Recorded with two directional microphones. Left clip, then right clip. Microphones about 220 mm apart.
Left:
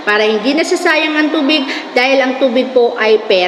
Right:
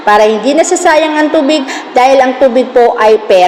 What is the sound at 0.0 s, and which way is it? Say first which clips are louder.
A woman's voice: right 6 dB; 15° right (ahead or behind).